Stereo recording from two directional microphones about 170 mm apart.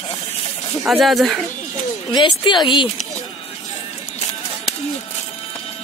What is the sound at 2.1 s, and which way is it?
Speech, 25° left (ahead or behind).